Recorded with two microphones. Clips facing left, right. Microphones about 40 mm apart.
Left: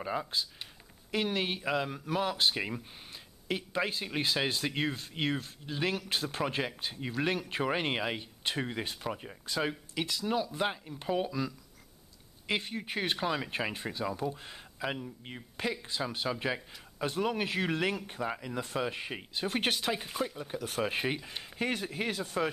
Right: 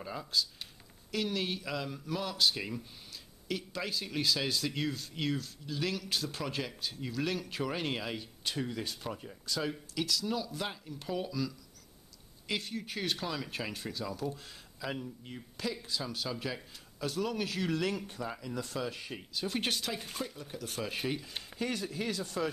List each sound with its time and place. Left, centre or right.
0.0 s speech: left
20.1 s speech: centre
20.3 s speech: left
21.3 s speech: centre
21.5 s speech: left